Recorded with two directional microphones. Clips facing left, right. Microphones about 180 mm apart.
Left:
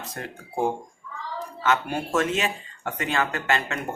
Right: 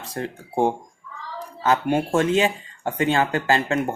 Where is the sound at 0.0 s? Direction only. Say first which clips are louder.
Right 6 dB; 30° right (ahead or behind).